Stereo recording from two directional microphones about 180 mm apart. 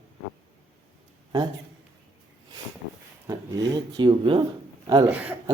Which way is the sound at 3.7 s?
25° right (ahead or behind).